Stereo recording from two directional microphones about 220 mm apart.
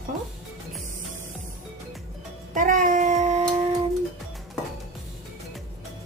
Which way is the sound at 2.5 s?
35° right (ahead or behind).